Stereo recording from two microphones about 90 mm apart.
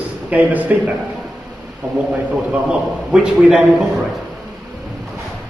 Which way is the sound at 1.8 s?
10° right (ahead or behind).